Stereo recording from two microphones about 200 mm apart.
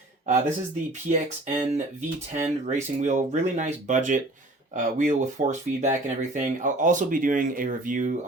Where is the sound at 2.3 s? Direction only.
35° right (ahead or behind).